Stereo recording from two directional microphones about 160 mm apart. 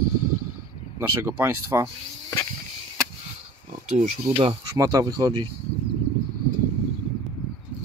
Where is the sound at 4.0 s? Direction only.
40° right (ahead or behind).